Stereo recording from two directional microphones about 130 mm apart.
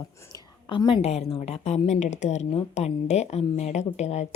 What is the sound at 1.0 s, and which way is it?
A woman's voice, 55° left (ahead or behind).